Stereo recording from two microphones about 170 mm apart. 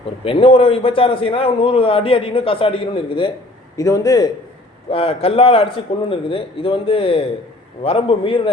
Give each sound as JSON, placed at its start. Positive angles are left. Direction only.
{"t": 0.3, "sound": "a man's voice", "side_deg": 35}
{"t": 3.8, "sound": "a man's voice", "side_deg": 20}
{"t": 4.9, "sound": "a man's voice", "side_deg": 35}